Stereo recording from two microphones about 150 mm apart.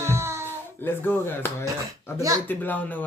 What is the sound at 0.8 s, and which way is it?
Speech, 15° left (ahead or behind).